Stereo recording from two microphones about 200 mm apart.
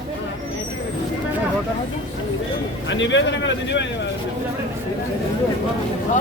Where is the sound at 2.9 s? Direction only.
65° left (ahead or behind).